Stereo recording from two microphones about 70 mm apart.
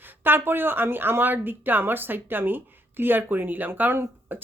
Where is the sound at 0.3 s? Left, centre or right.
Right.